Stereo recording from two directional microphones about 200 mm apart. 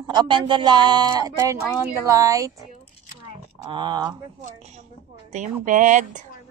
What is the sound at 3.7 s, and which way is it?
Speech, 20° right (ahead or behind).